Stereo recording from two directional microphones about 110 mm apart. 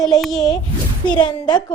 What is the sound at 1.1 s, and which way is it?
Speech, 45° left (ahead or behind).